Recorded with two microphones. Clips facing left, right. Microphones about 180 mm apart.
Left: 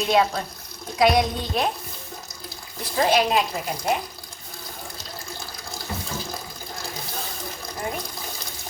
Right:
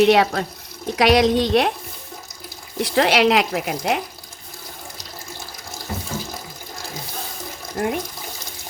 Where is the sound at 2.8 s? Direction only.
80° right.